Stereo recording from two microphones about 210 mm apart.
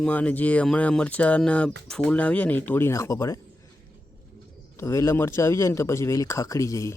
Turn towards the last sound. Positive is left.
turn(degrees=15)  # may be behind; listen again after turning